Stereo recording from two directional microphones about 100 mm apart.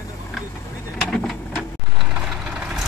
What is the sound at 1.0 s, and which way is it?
Printer, 5° left (ahead or behind).